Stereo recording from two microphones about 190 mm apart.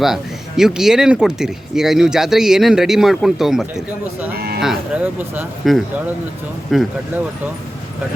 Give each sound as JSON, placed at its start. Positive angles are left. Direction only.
{"t": 0.0, "sound": "speech", "side_deg": 0}
{"t": 4.4, "sound": "a sound", "side_deg": -55}
{"t": 4.6, "sound": "speech", "side_deg": -5}